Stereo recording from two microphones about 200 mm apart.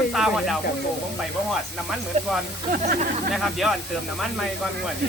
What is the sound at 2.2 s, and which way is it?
Speech, 35° right (ahead or behind).